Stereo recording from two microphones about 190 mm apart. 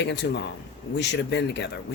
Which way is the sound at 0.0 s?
65° left (ahead or behind).